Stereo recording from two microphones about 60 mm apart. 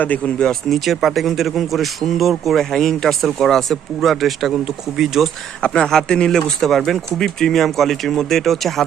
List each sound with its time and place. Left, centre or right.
0.7 s speech: centre
5.6 s speech: centre